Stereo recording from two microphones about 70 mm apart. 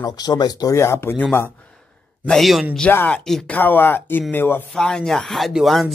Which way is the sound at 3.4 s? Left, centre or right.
Left.